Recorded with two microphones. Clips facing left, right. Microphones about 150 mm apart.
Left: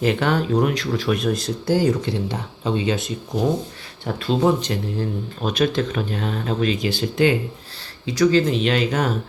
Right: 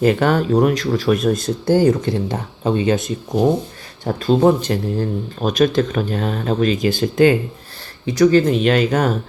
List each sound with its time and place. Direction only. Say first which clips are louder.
0.0 s speech: right 5 dB; 45° right (ahead or behind)